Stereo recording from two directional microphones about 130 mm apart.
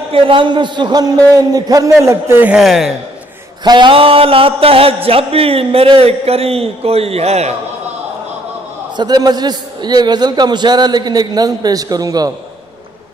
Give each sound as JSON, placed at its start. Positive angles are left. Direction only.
{"t": 0.1, "sound": "a man's voice", "side_deg": -40}
{"t": 2.6, "sound": "speech", "side_deg": 0}
{"t": 3.6, "sound": "a man's voice", "side_deg": -35}
{"t": 8.9, "sound": "a man's voice", "side_deg": -30}